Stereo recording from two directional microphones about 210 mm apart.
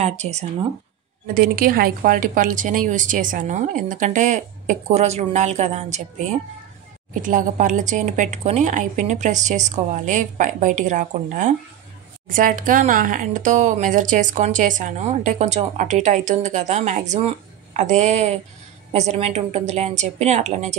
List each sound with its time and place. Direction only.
0.0 s speech: 30° right (ahead or behind)
1.2 s speech: 45° right (ahead or behind)
7.2 s speech: 40° right (ahead or behind)